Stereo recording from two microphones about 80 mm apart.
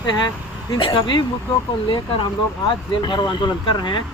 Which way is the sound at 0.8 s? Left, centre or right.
Left.